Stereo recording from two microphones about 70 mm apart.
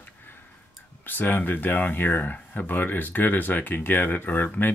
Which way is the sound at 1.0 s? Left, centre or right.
Left.